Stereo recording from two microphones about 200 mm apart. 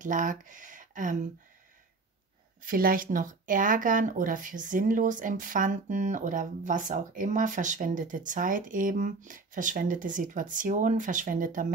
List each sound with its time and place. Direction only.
0.0 s speech: 40° right (ahead or behind)
2.6 s speech: 45° right (ahead or behind)